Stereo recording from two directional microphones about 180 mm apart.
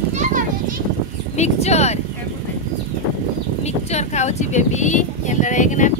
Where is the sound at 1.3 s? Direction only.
40° left (ahead or behind).